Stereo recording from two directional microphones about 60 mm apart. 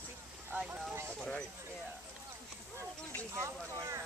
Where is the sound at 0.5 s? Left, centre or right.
Centre.